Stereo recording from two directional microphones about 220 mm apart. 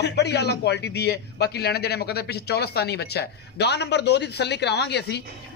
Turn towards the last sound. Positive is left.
turn(degrees=50)  # may be behind; listen again after turning